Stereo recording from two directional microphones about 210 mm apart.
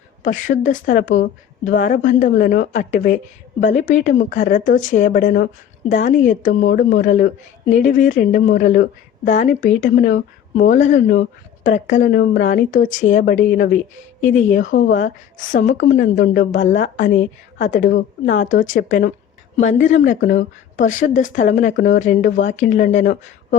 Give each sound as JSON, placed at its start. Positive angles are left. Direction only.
{"t": 0.2, "sound": "a woman's voice", "side_deg": 40}